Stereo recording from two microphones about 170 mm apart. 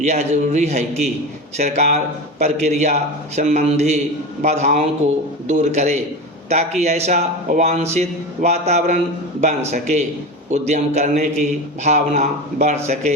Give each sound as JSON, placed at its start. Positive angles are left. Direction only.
{"t": 0.0, "sound": "a man's voice", "side_deg": -40}